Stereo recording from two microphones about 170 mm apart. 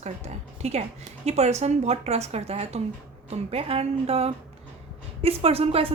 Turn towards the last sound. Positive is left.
turn(degrees=-35)  # may be behind; listen again after turning